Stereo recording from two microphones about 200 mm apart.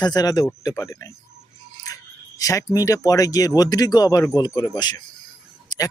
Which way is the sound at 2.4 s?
15° left (ahead or behind).